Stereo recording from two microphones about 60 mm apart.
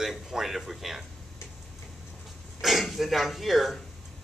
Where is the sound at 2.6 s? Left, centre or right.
Centre.